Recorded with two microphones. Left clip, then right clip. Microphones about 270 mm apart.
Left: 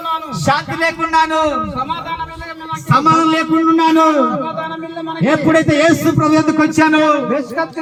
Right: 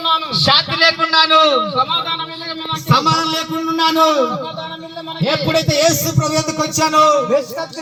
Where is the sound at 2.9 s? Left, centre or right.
Right.